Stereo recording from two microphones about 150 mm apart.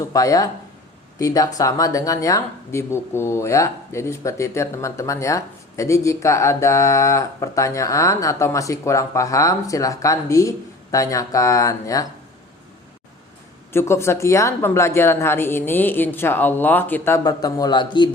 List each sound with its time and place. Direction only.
0.0 s speech: 20° left (ahead or behind)
13.7 s a woman's voice: 15° left (ahead or behind)